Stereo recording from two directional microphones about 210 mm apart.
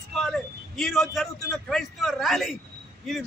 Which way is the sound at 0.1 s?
Centre (ahead or behind).